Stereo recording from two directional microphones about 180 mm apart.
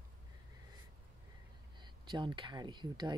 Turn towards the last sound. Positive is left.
turn(degrees=-25)  # may be behind; listen again after turning